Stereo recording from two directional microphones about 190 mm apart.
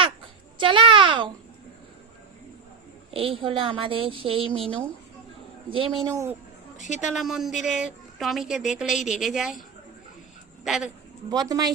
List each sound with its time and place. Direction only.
0.6 s a sound: 25° right (ahead or behind)
3.1 s a woman's voice: 30° right (ahead or behind)
6.7 s a woman's voice: 40° left (ahead or behind)
7.1 s a woman's voice: centre (ahead or behind)
11.3 s a woman's voice: 20° right (ahead or behind)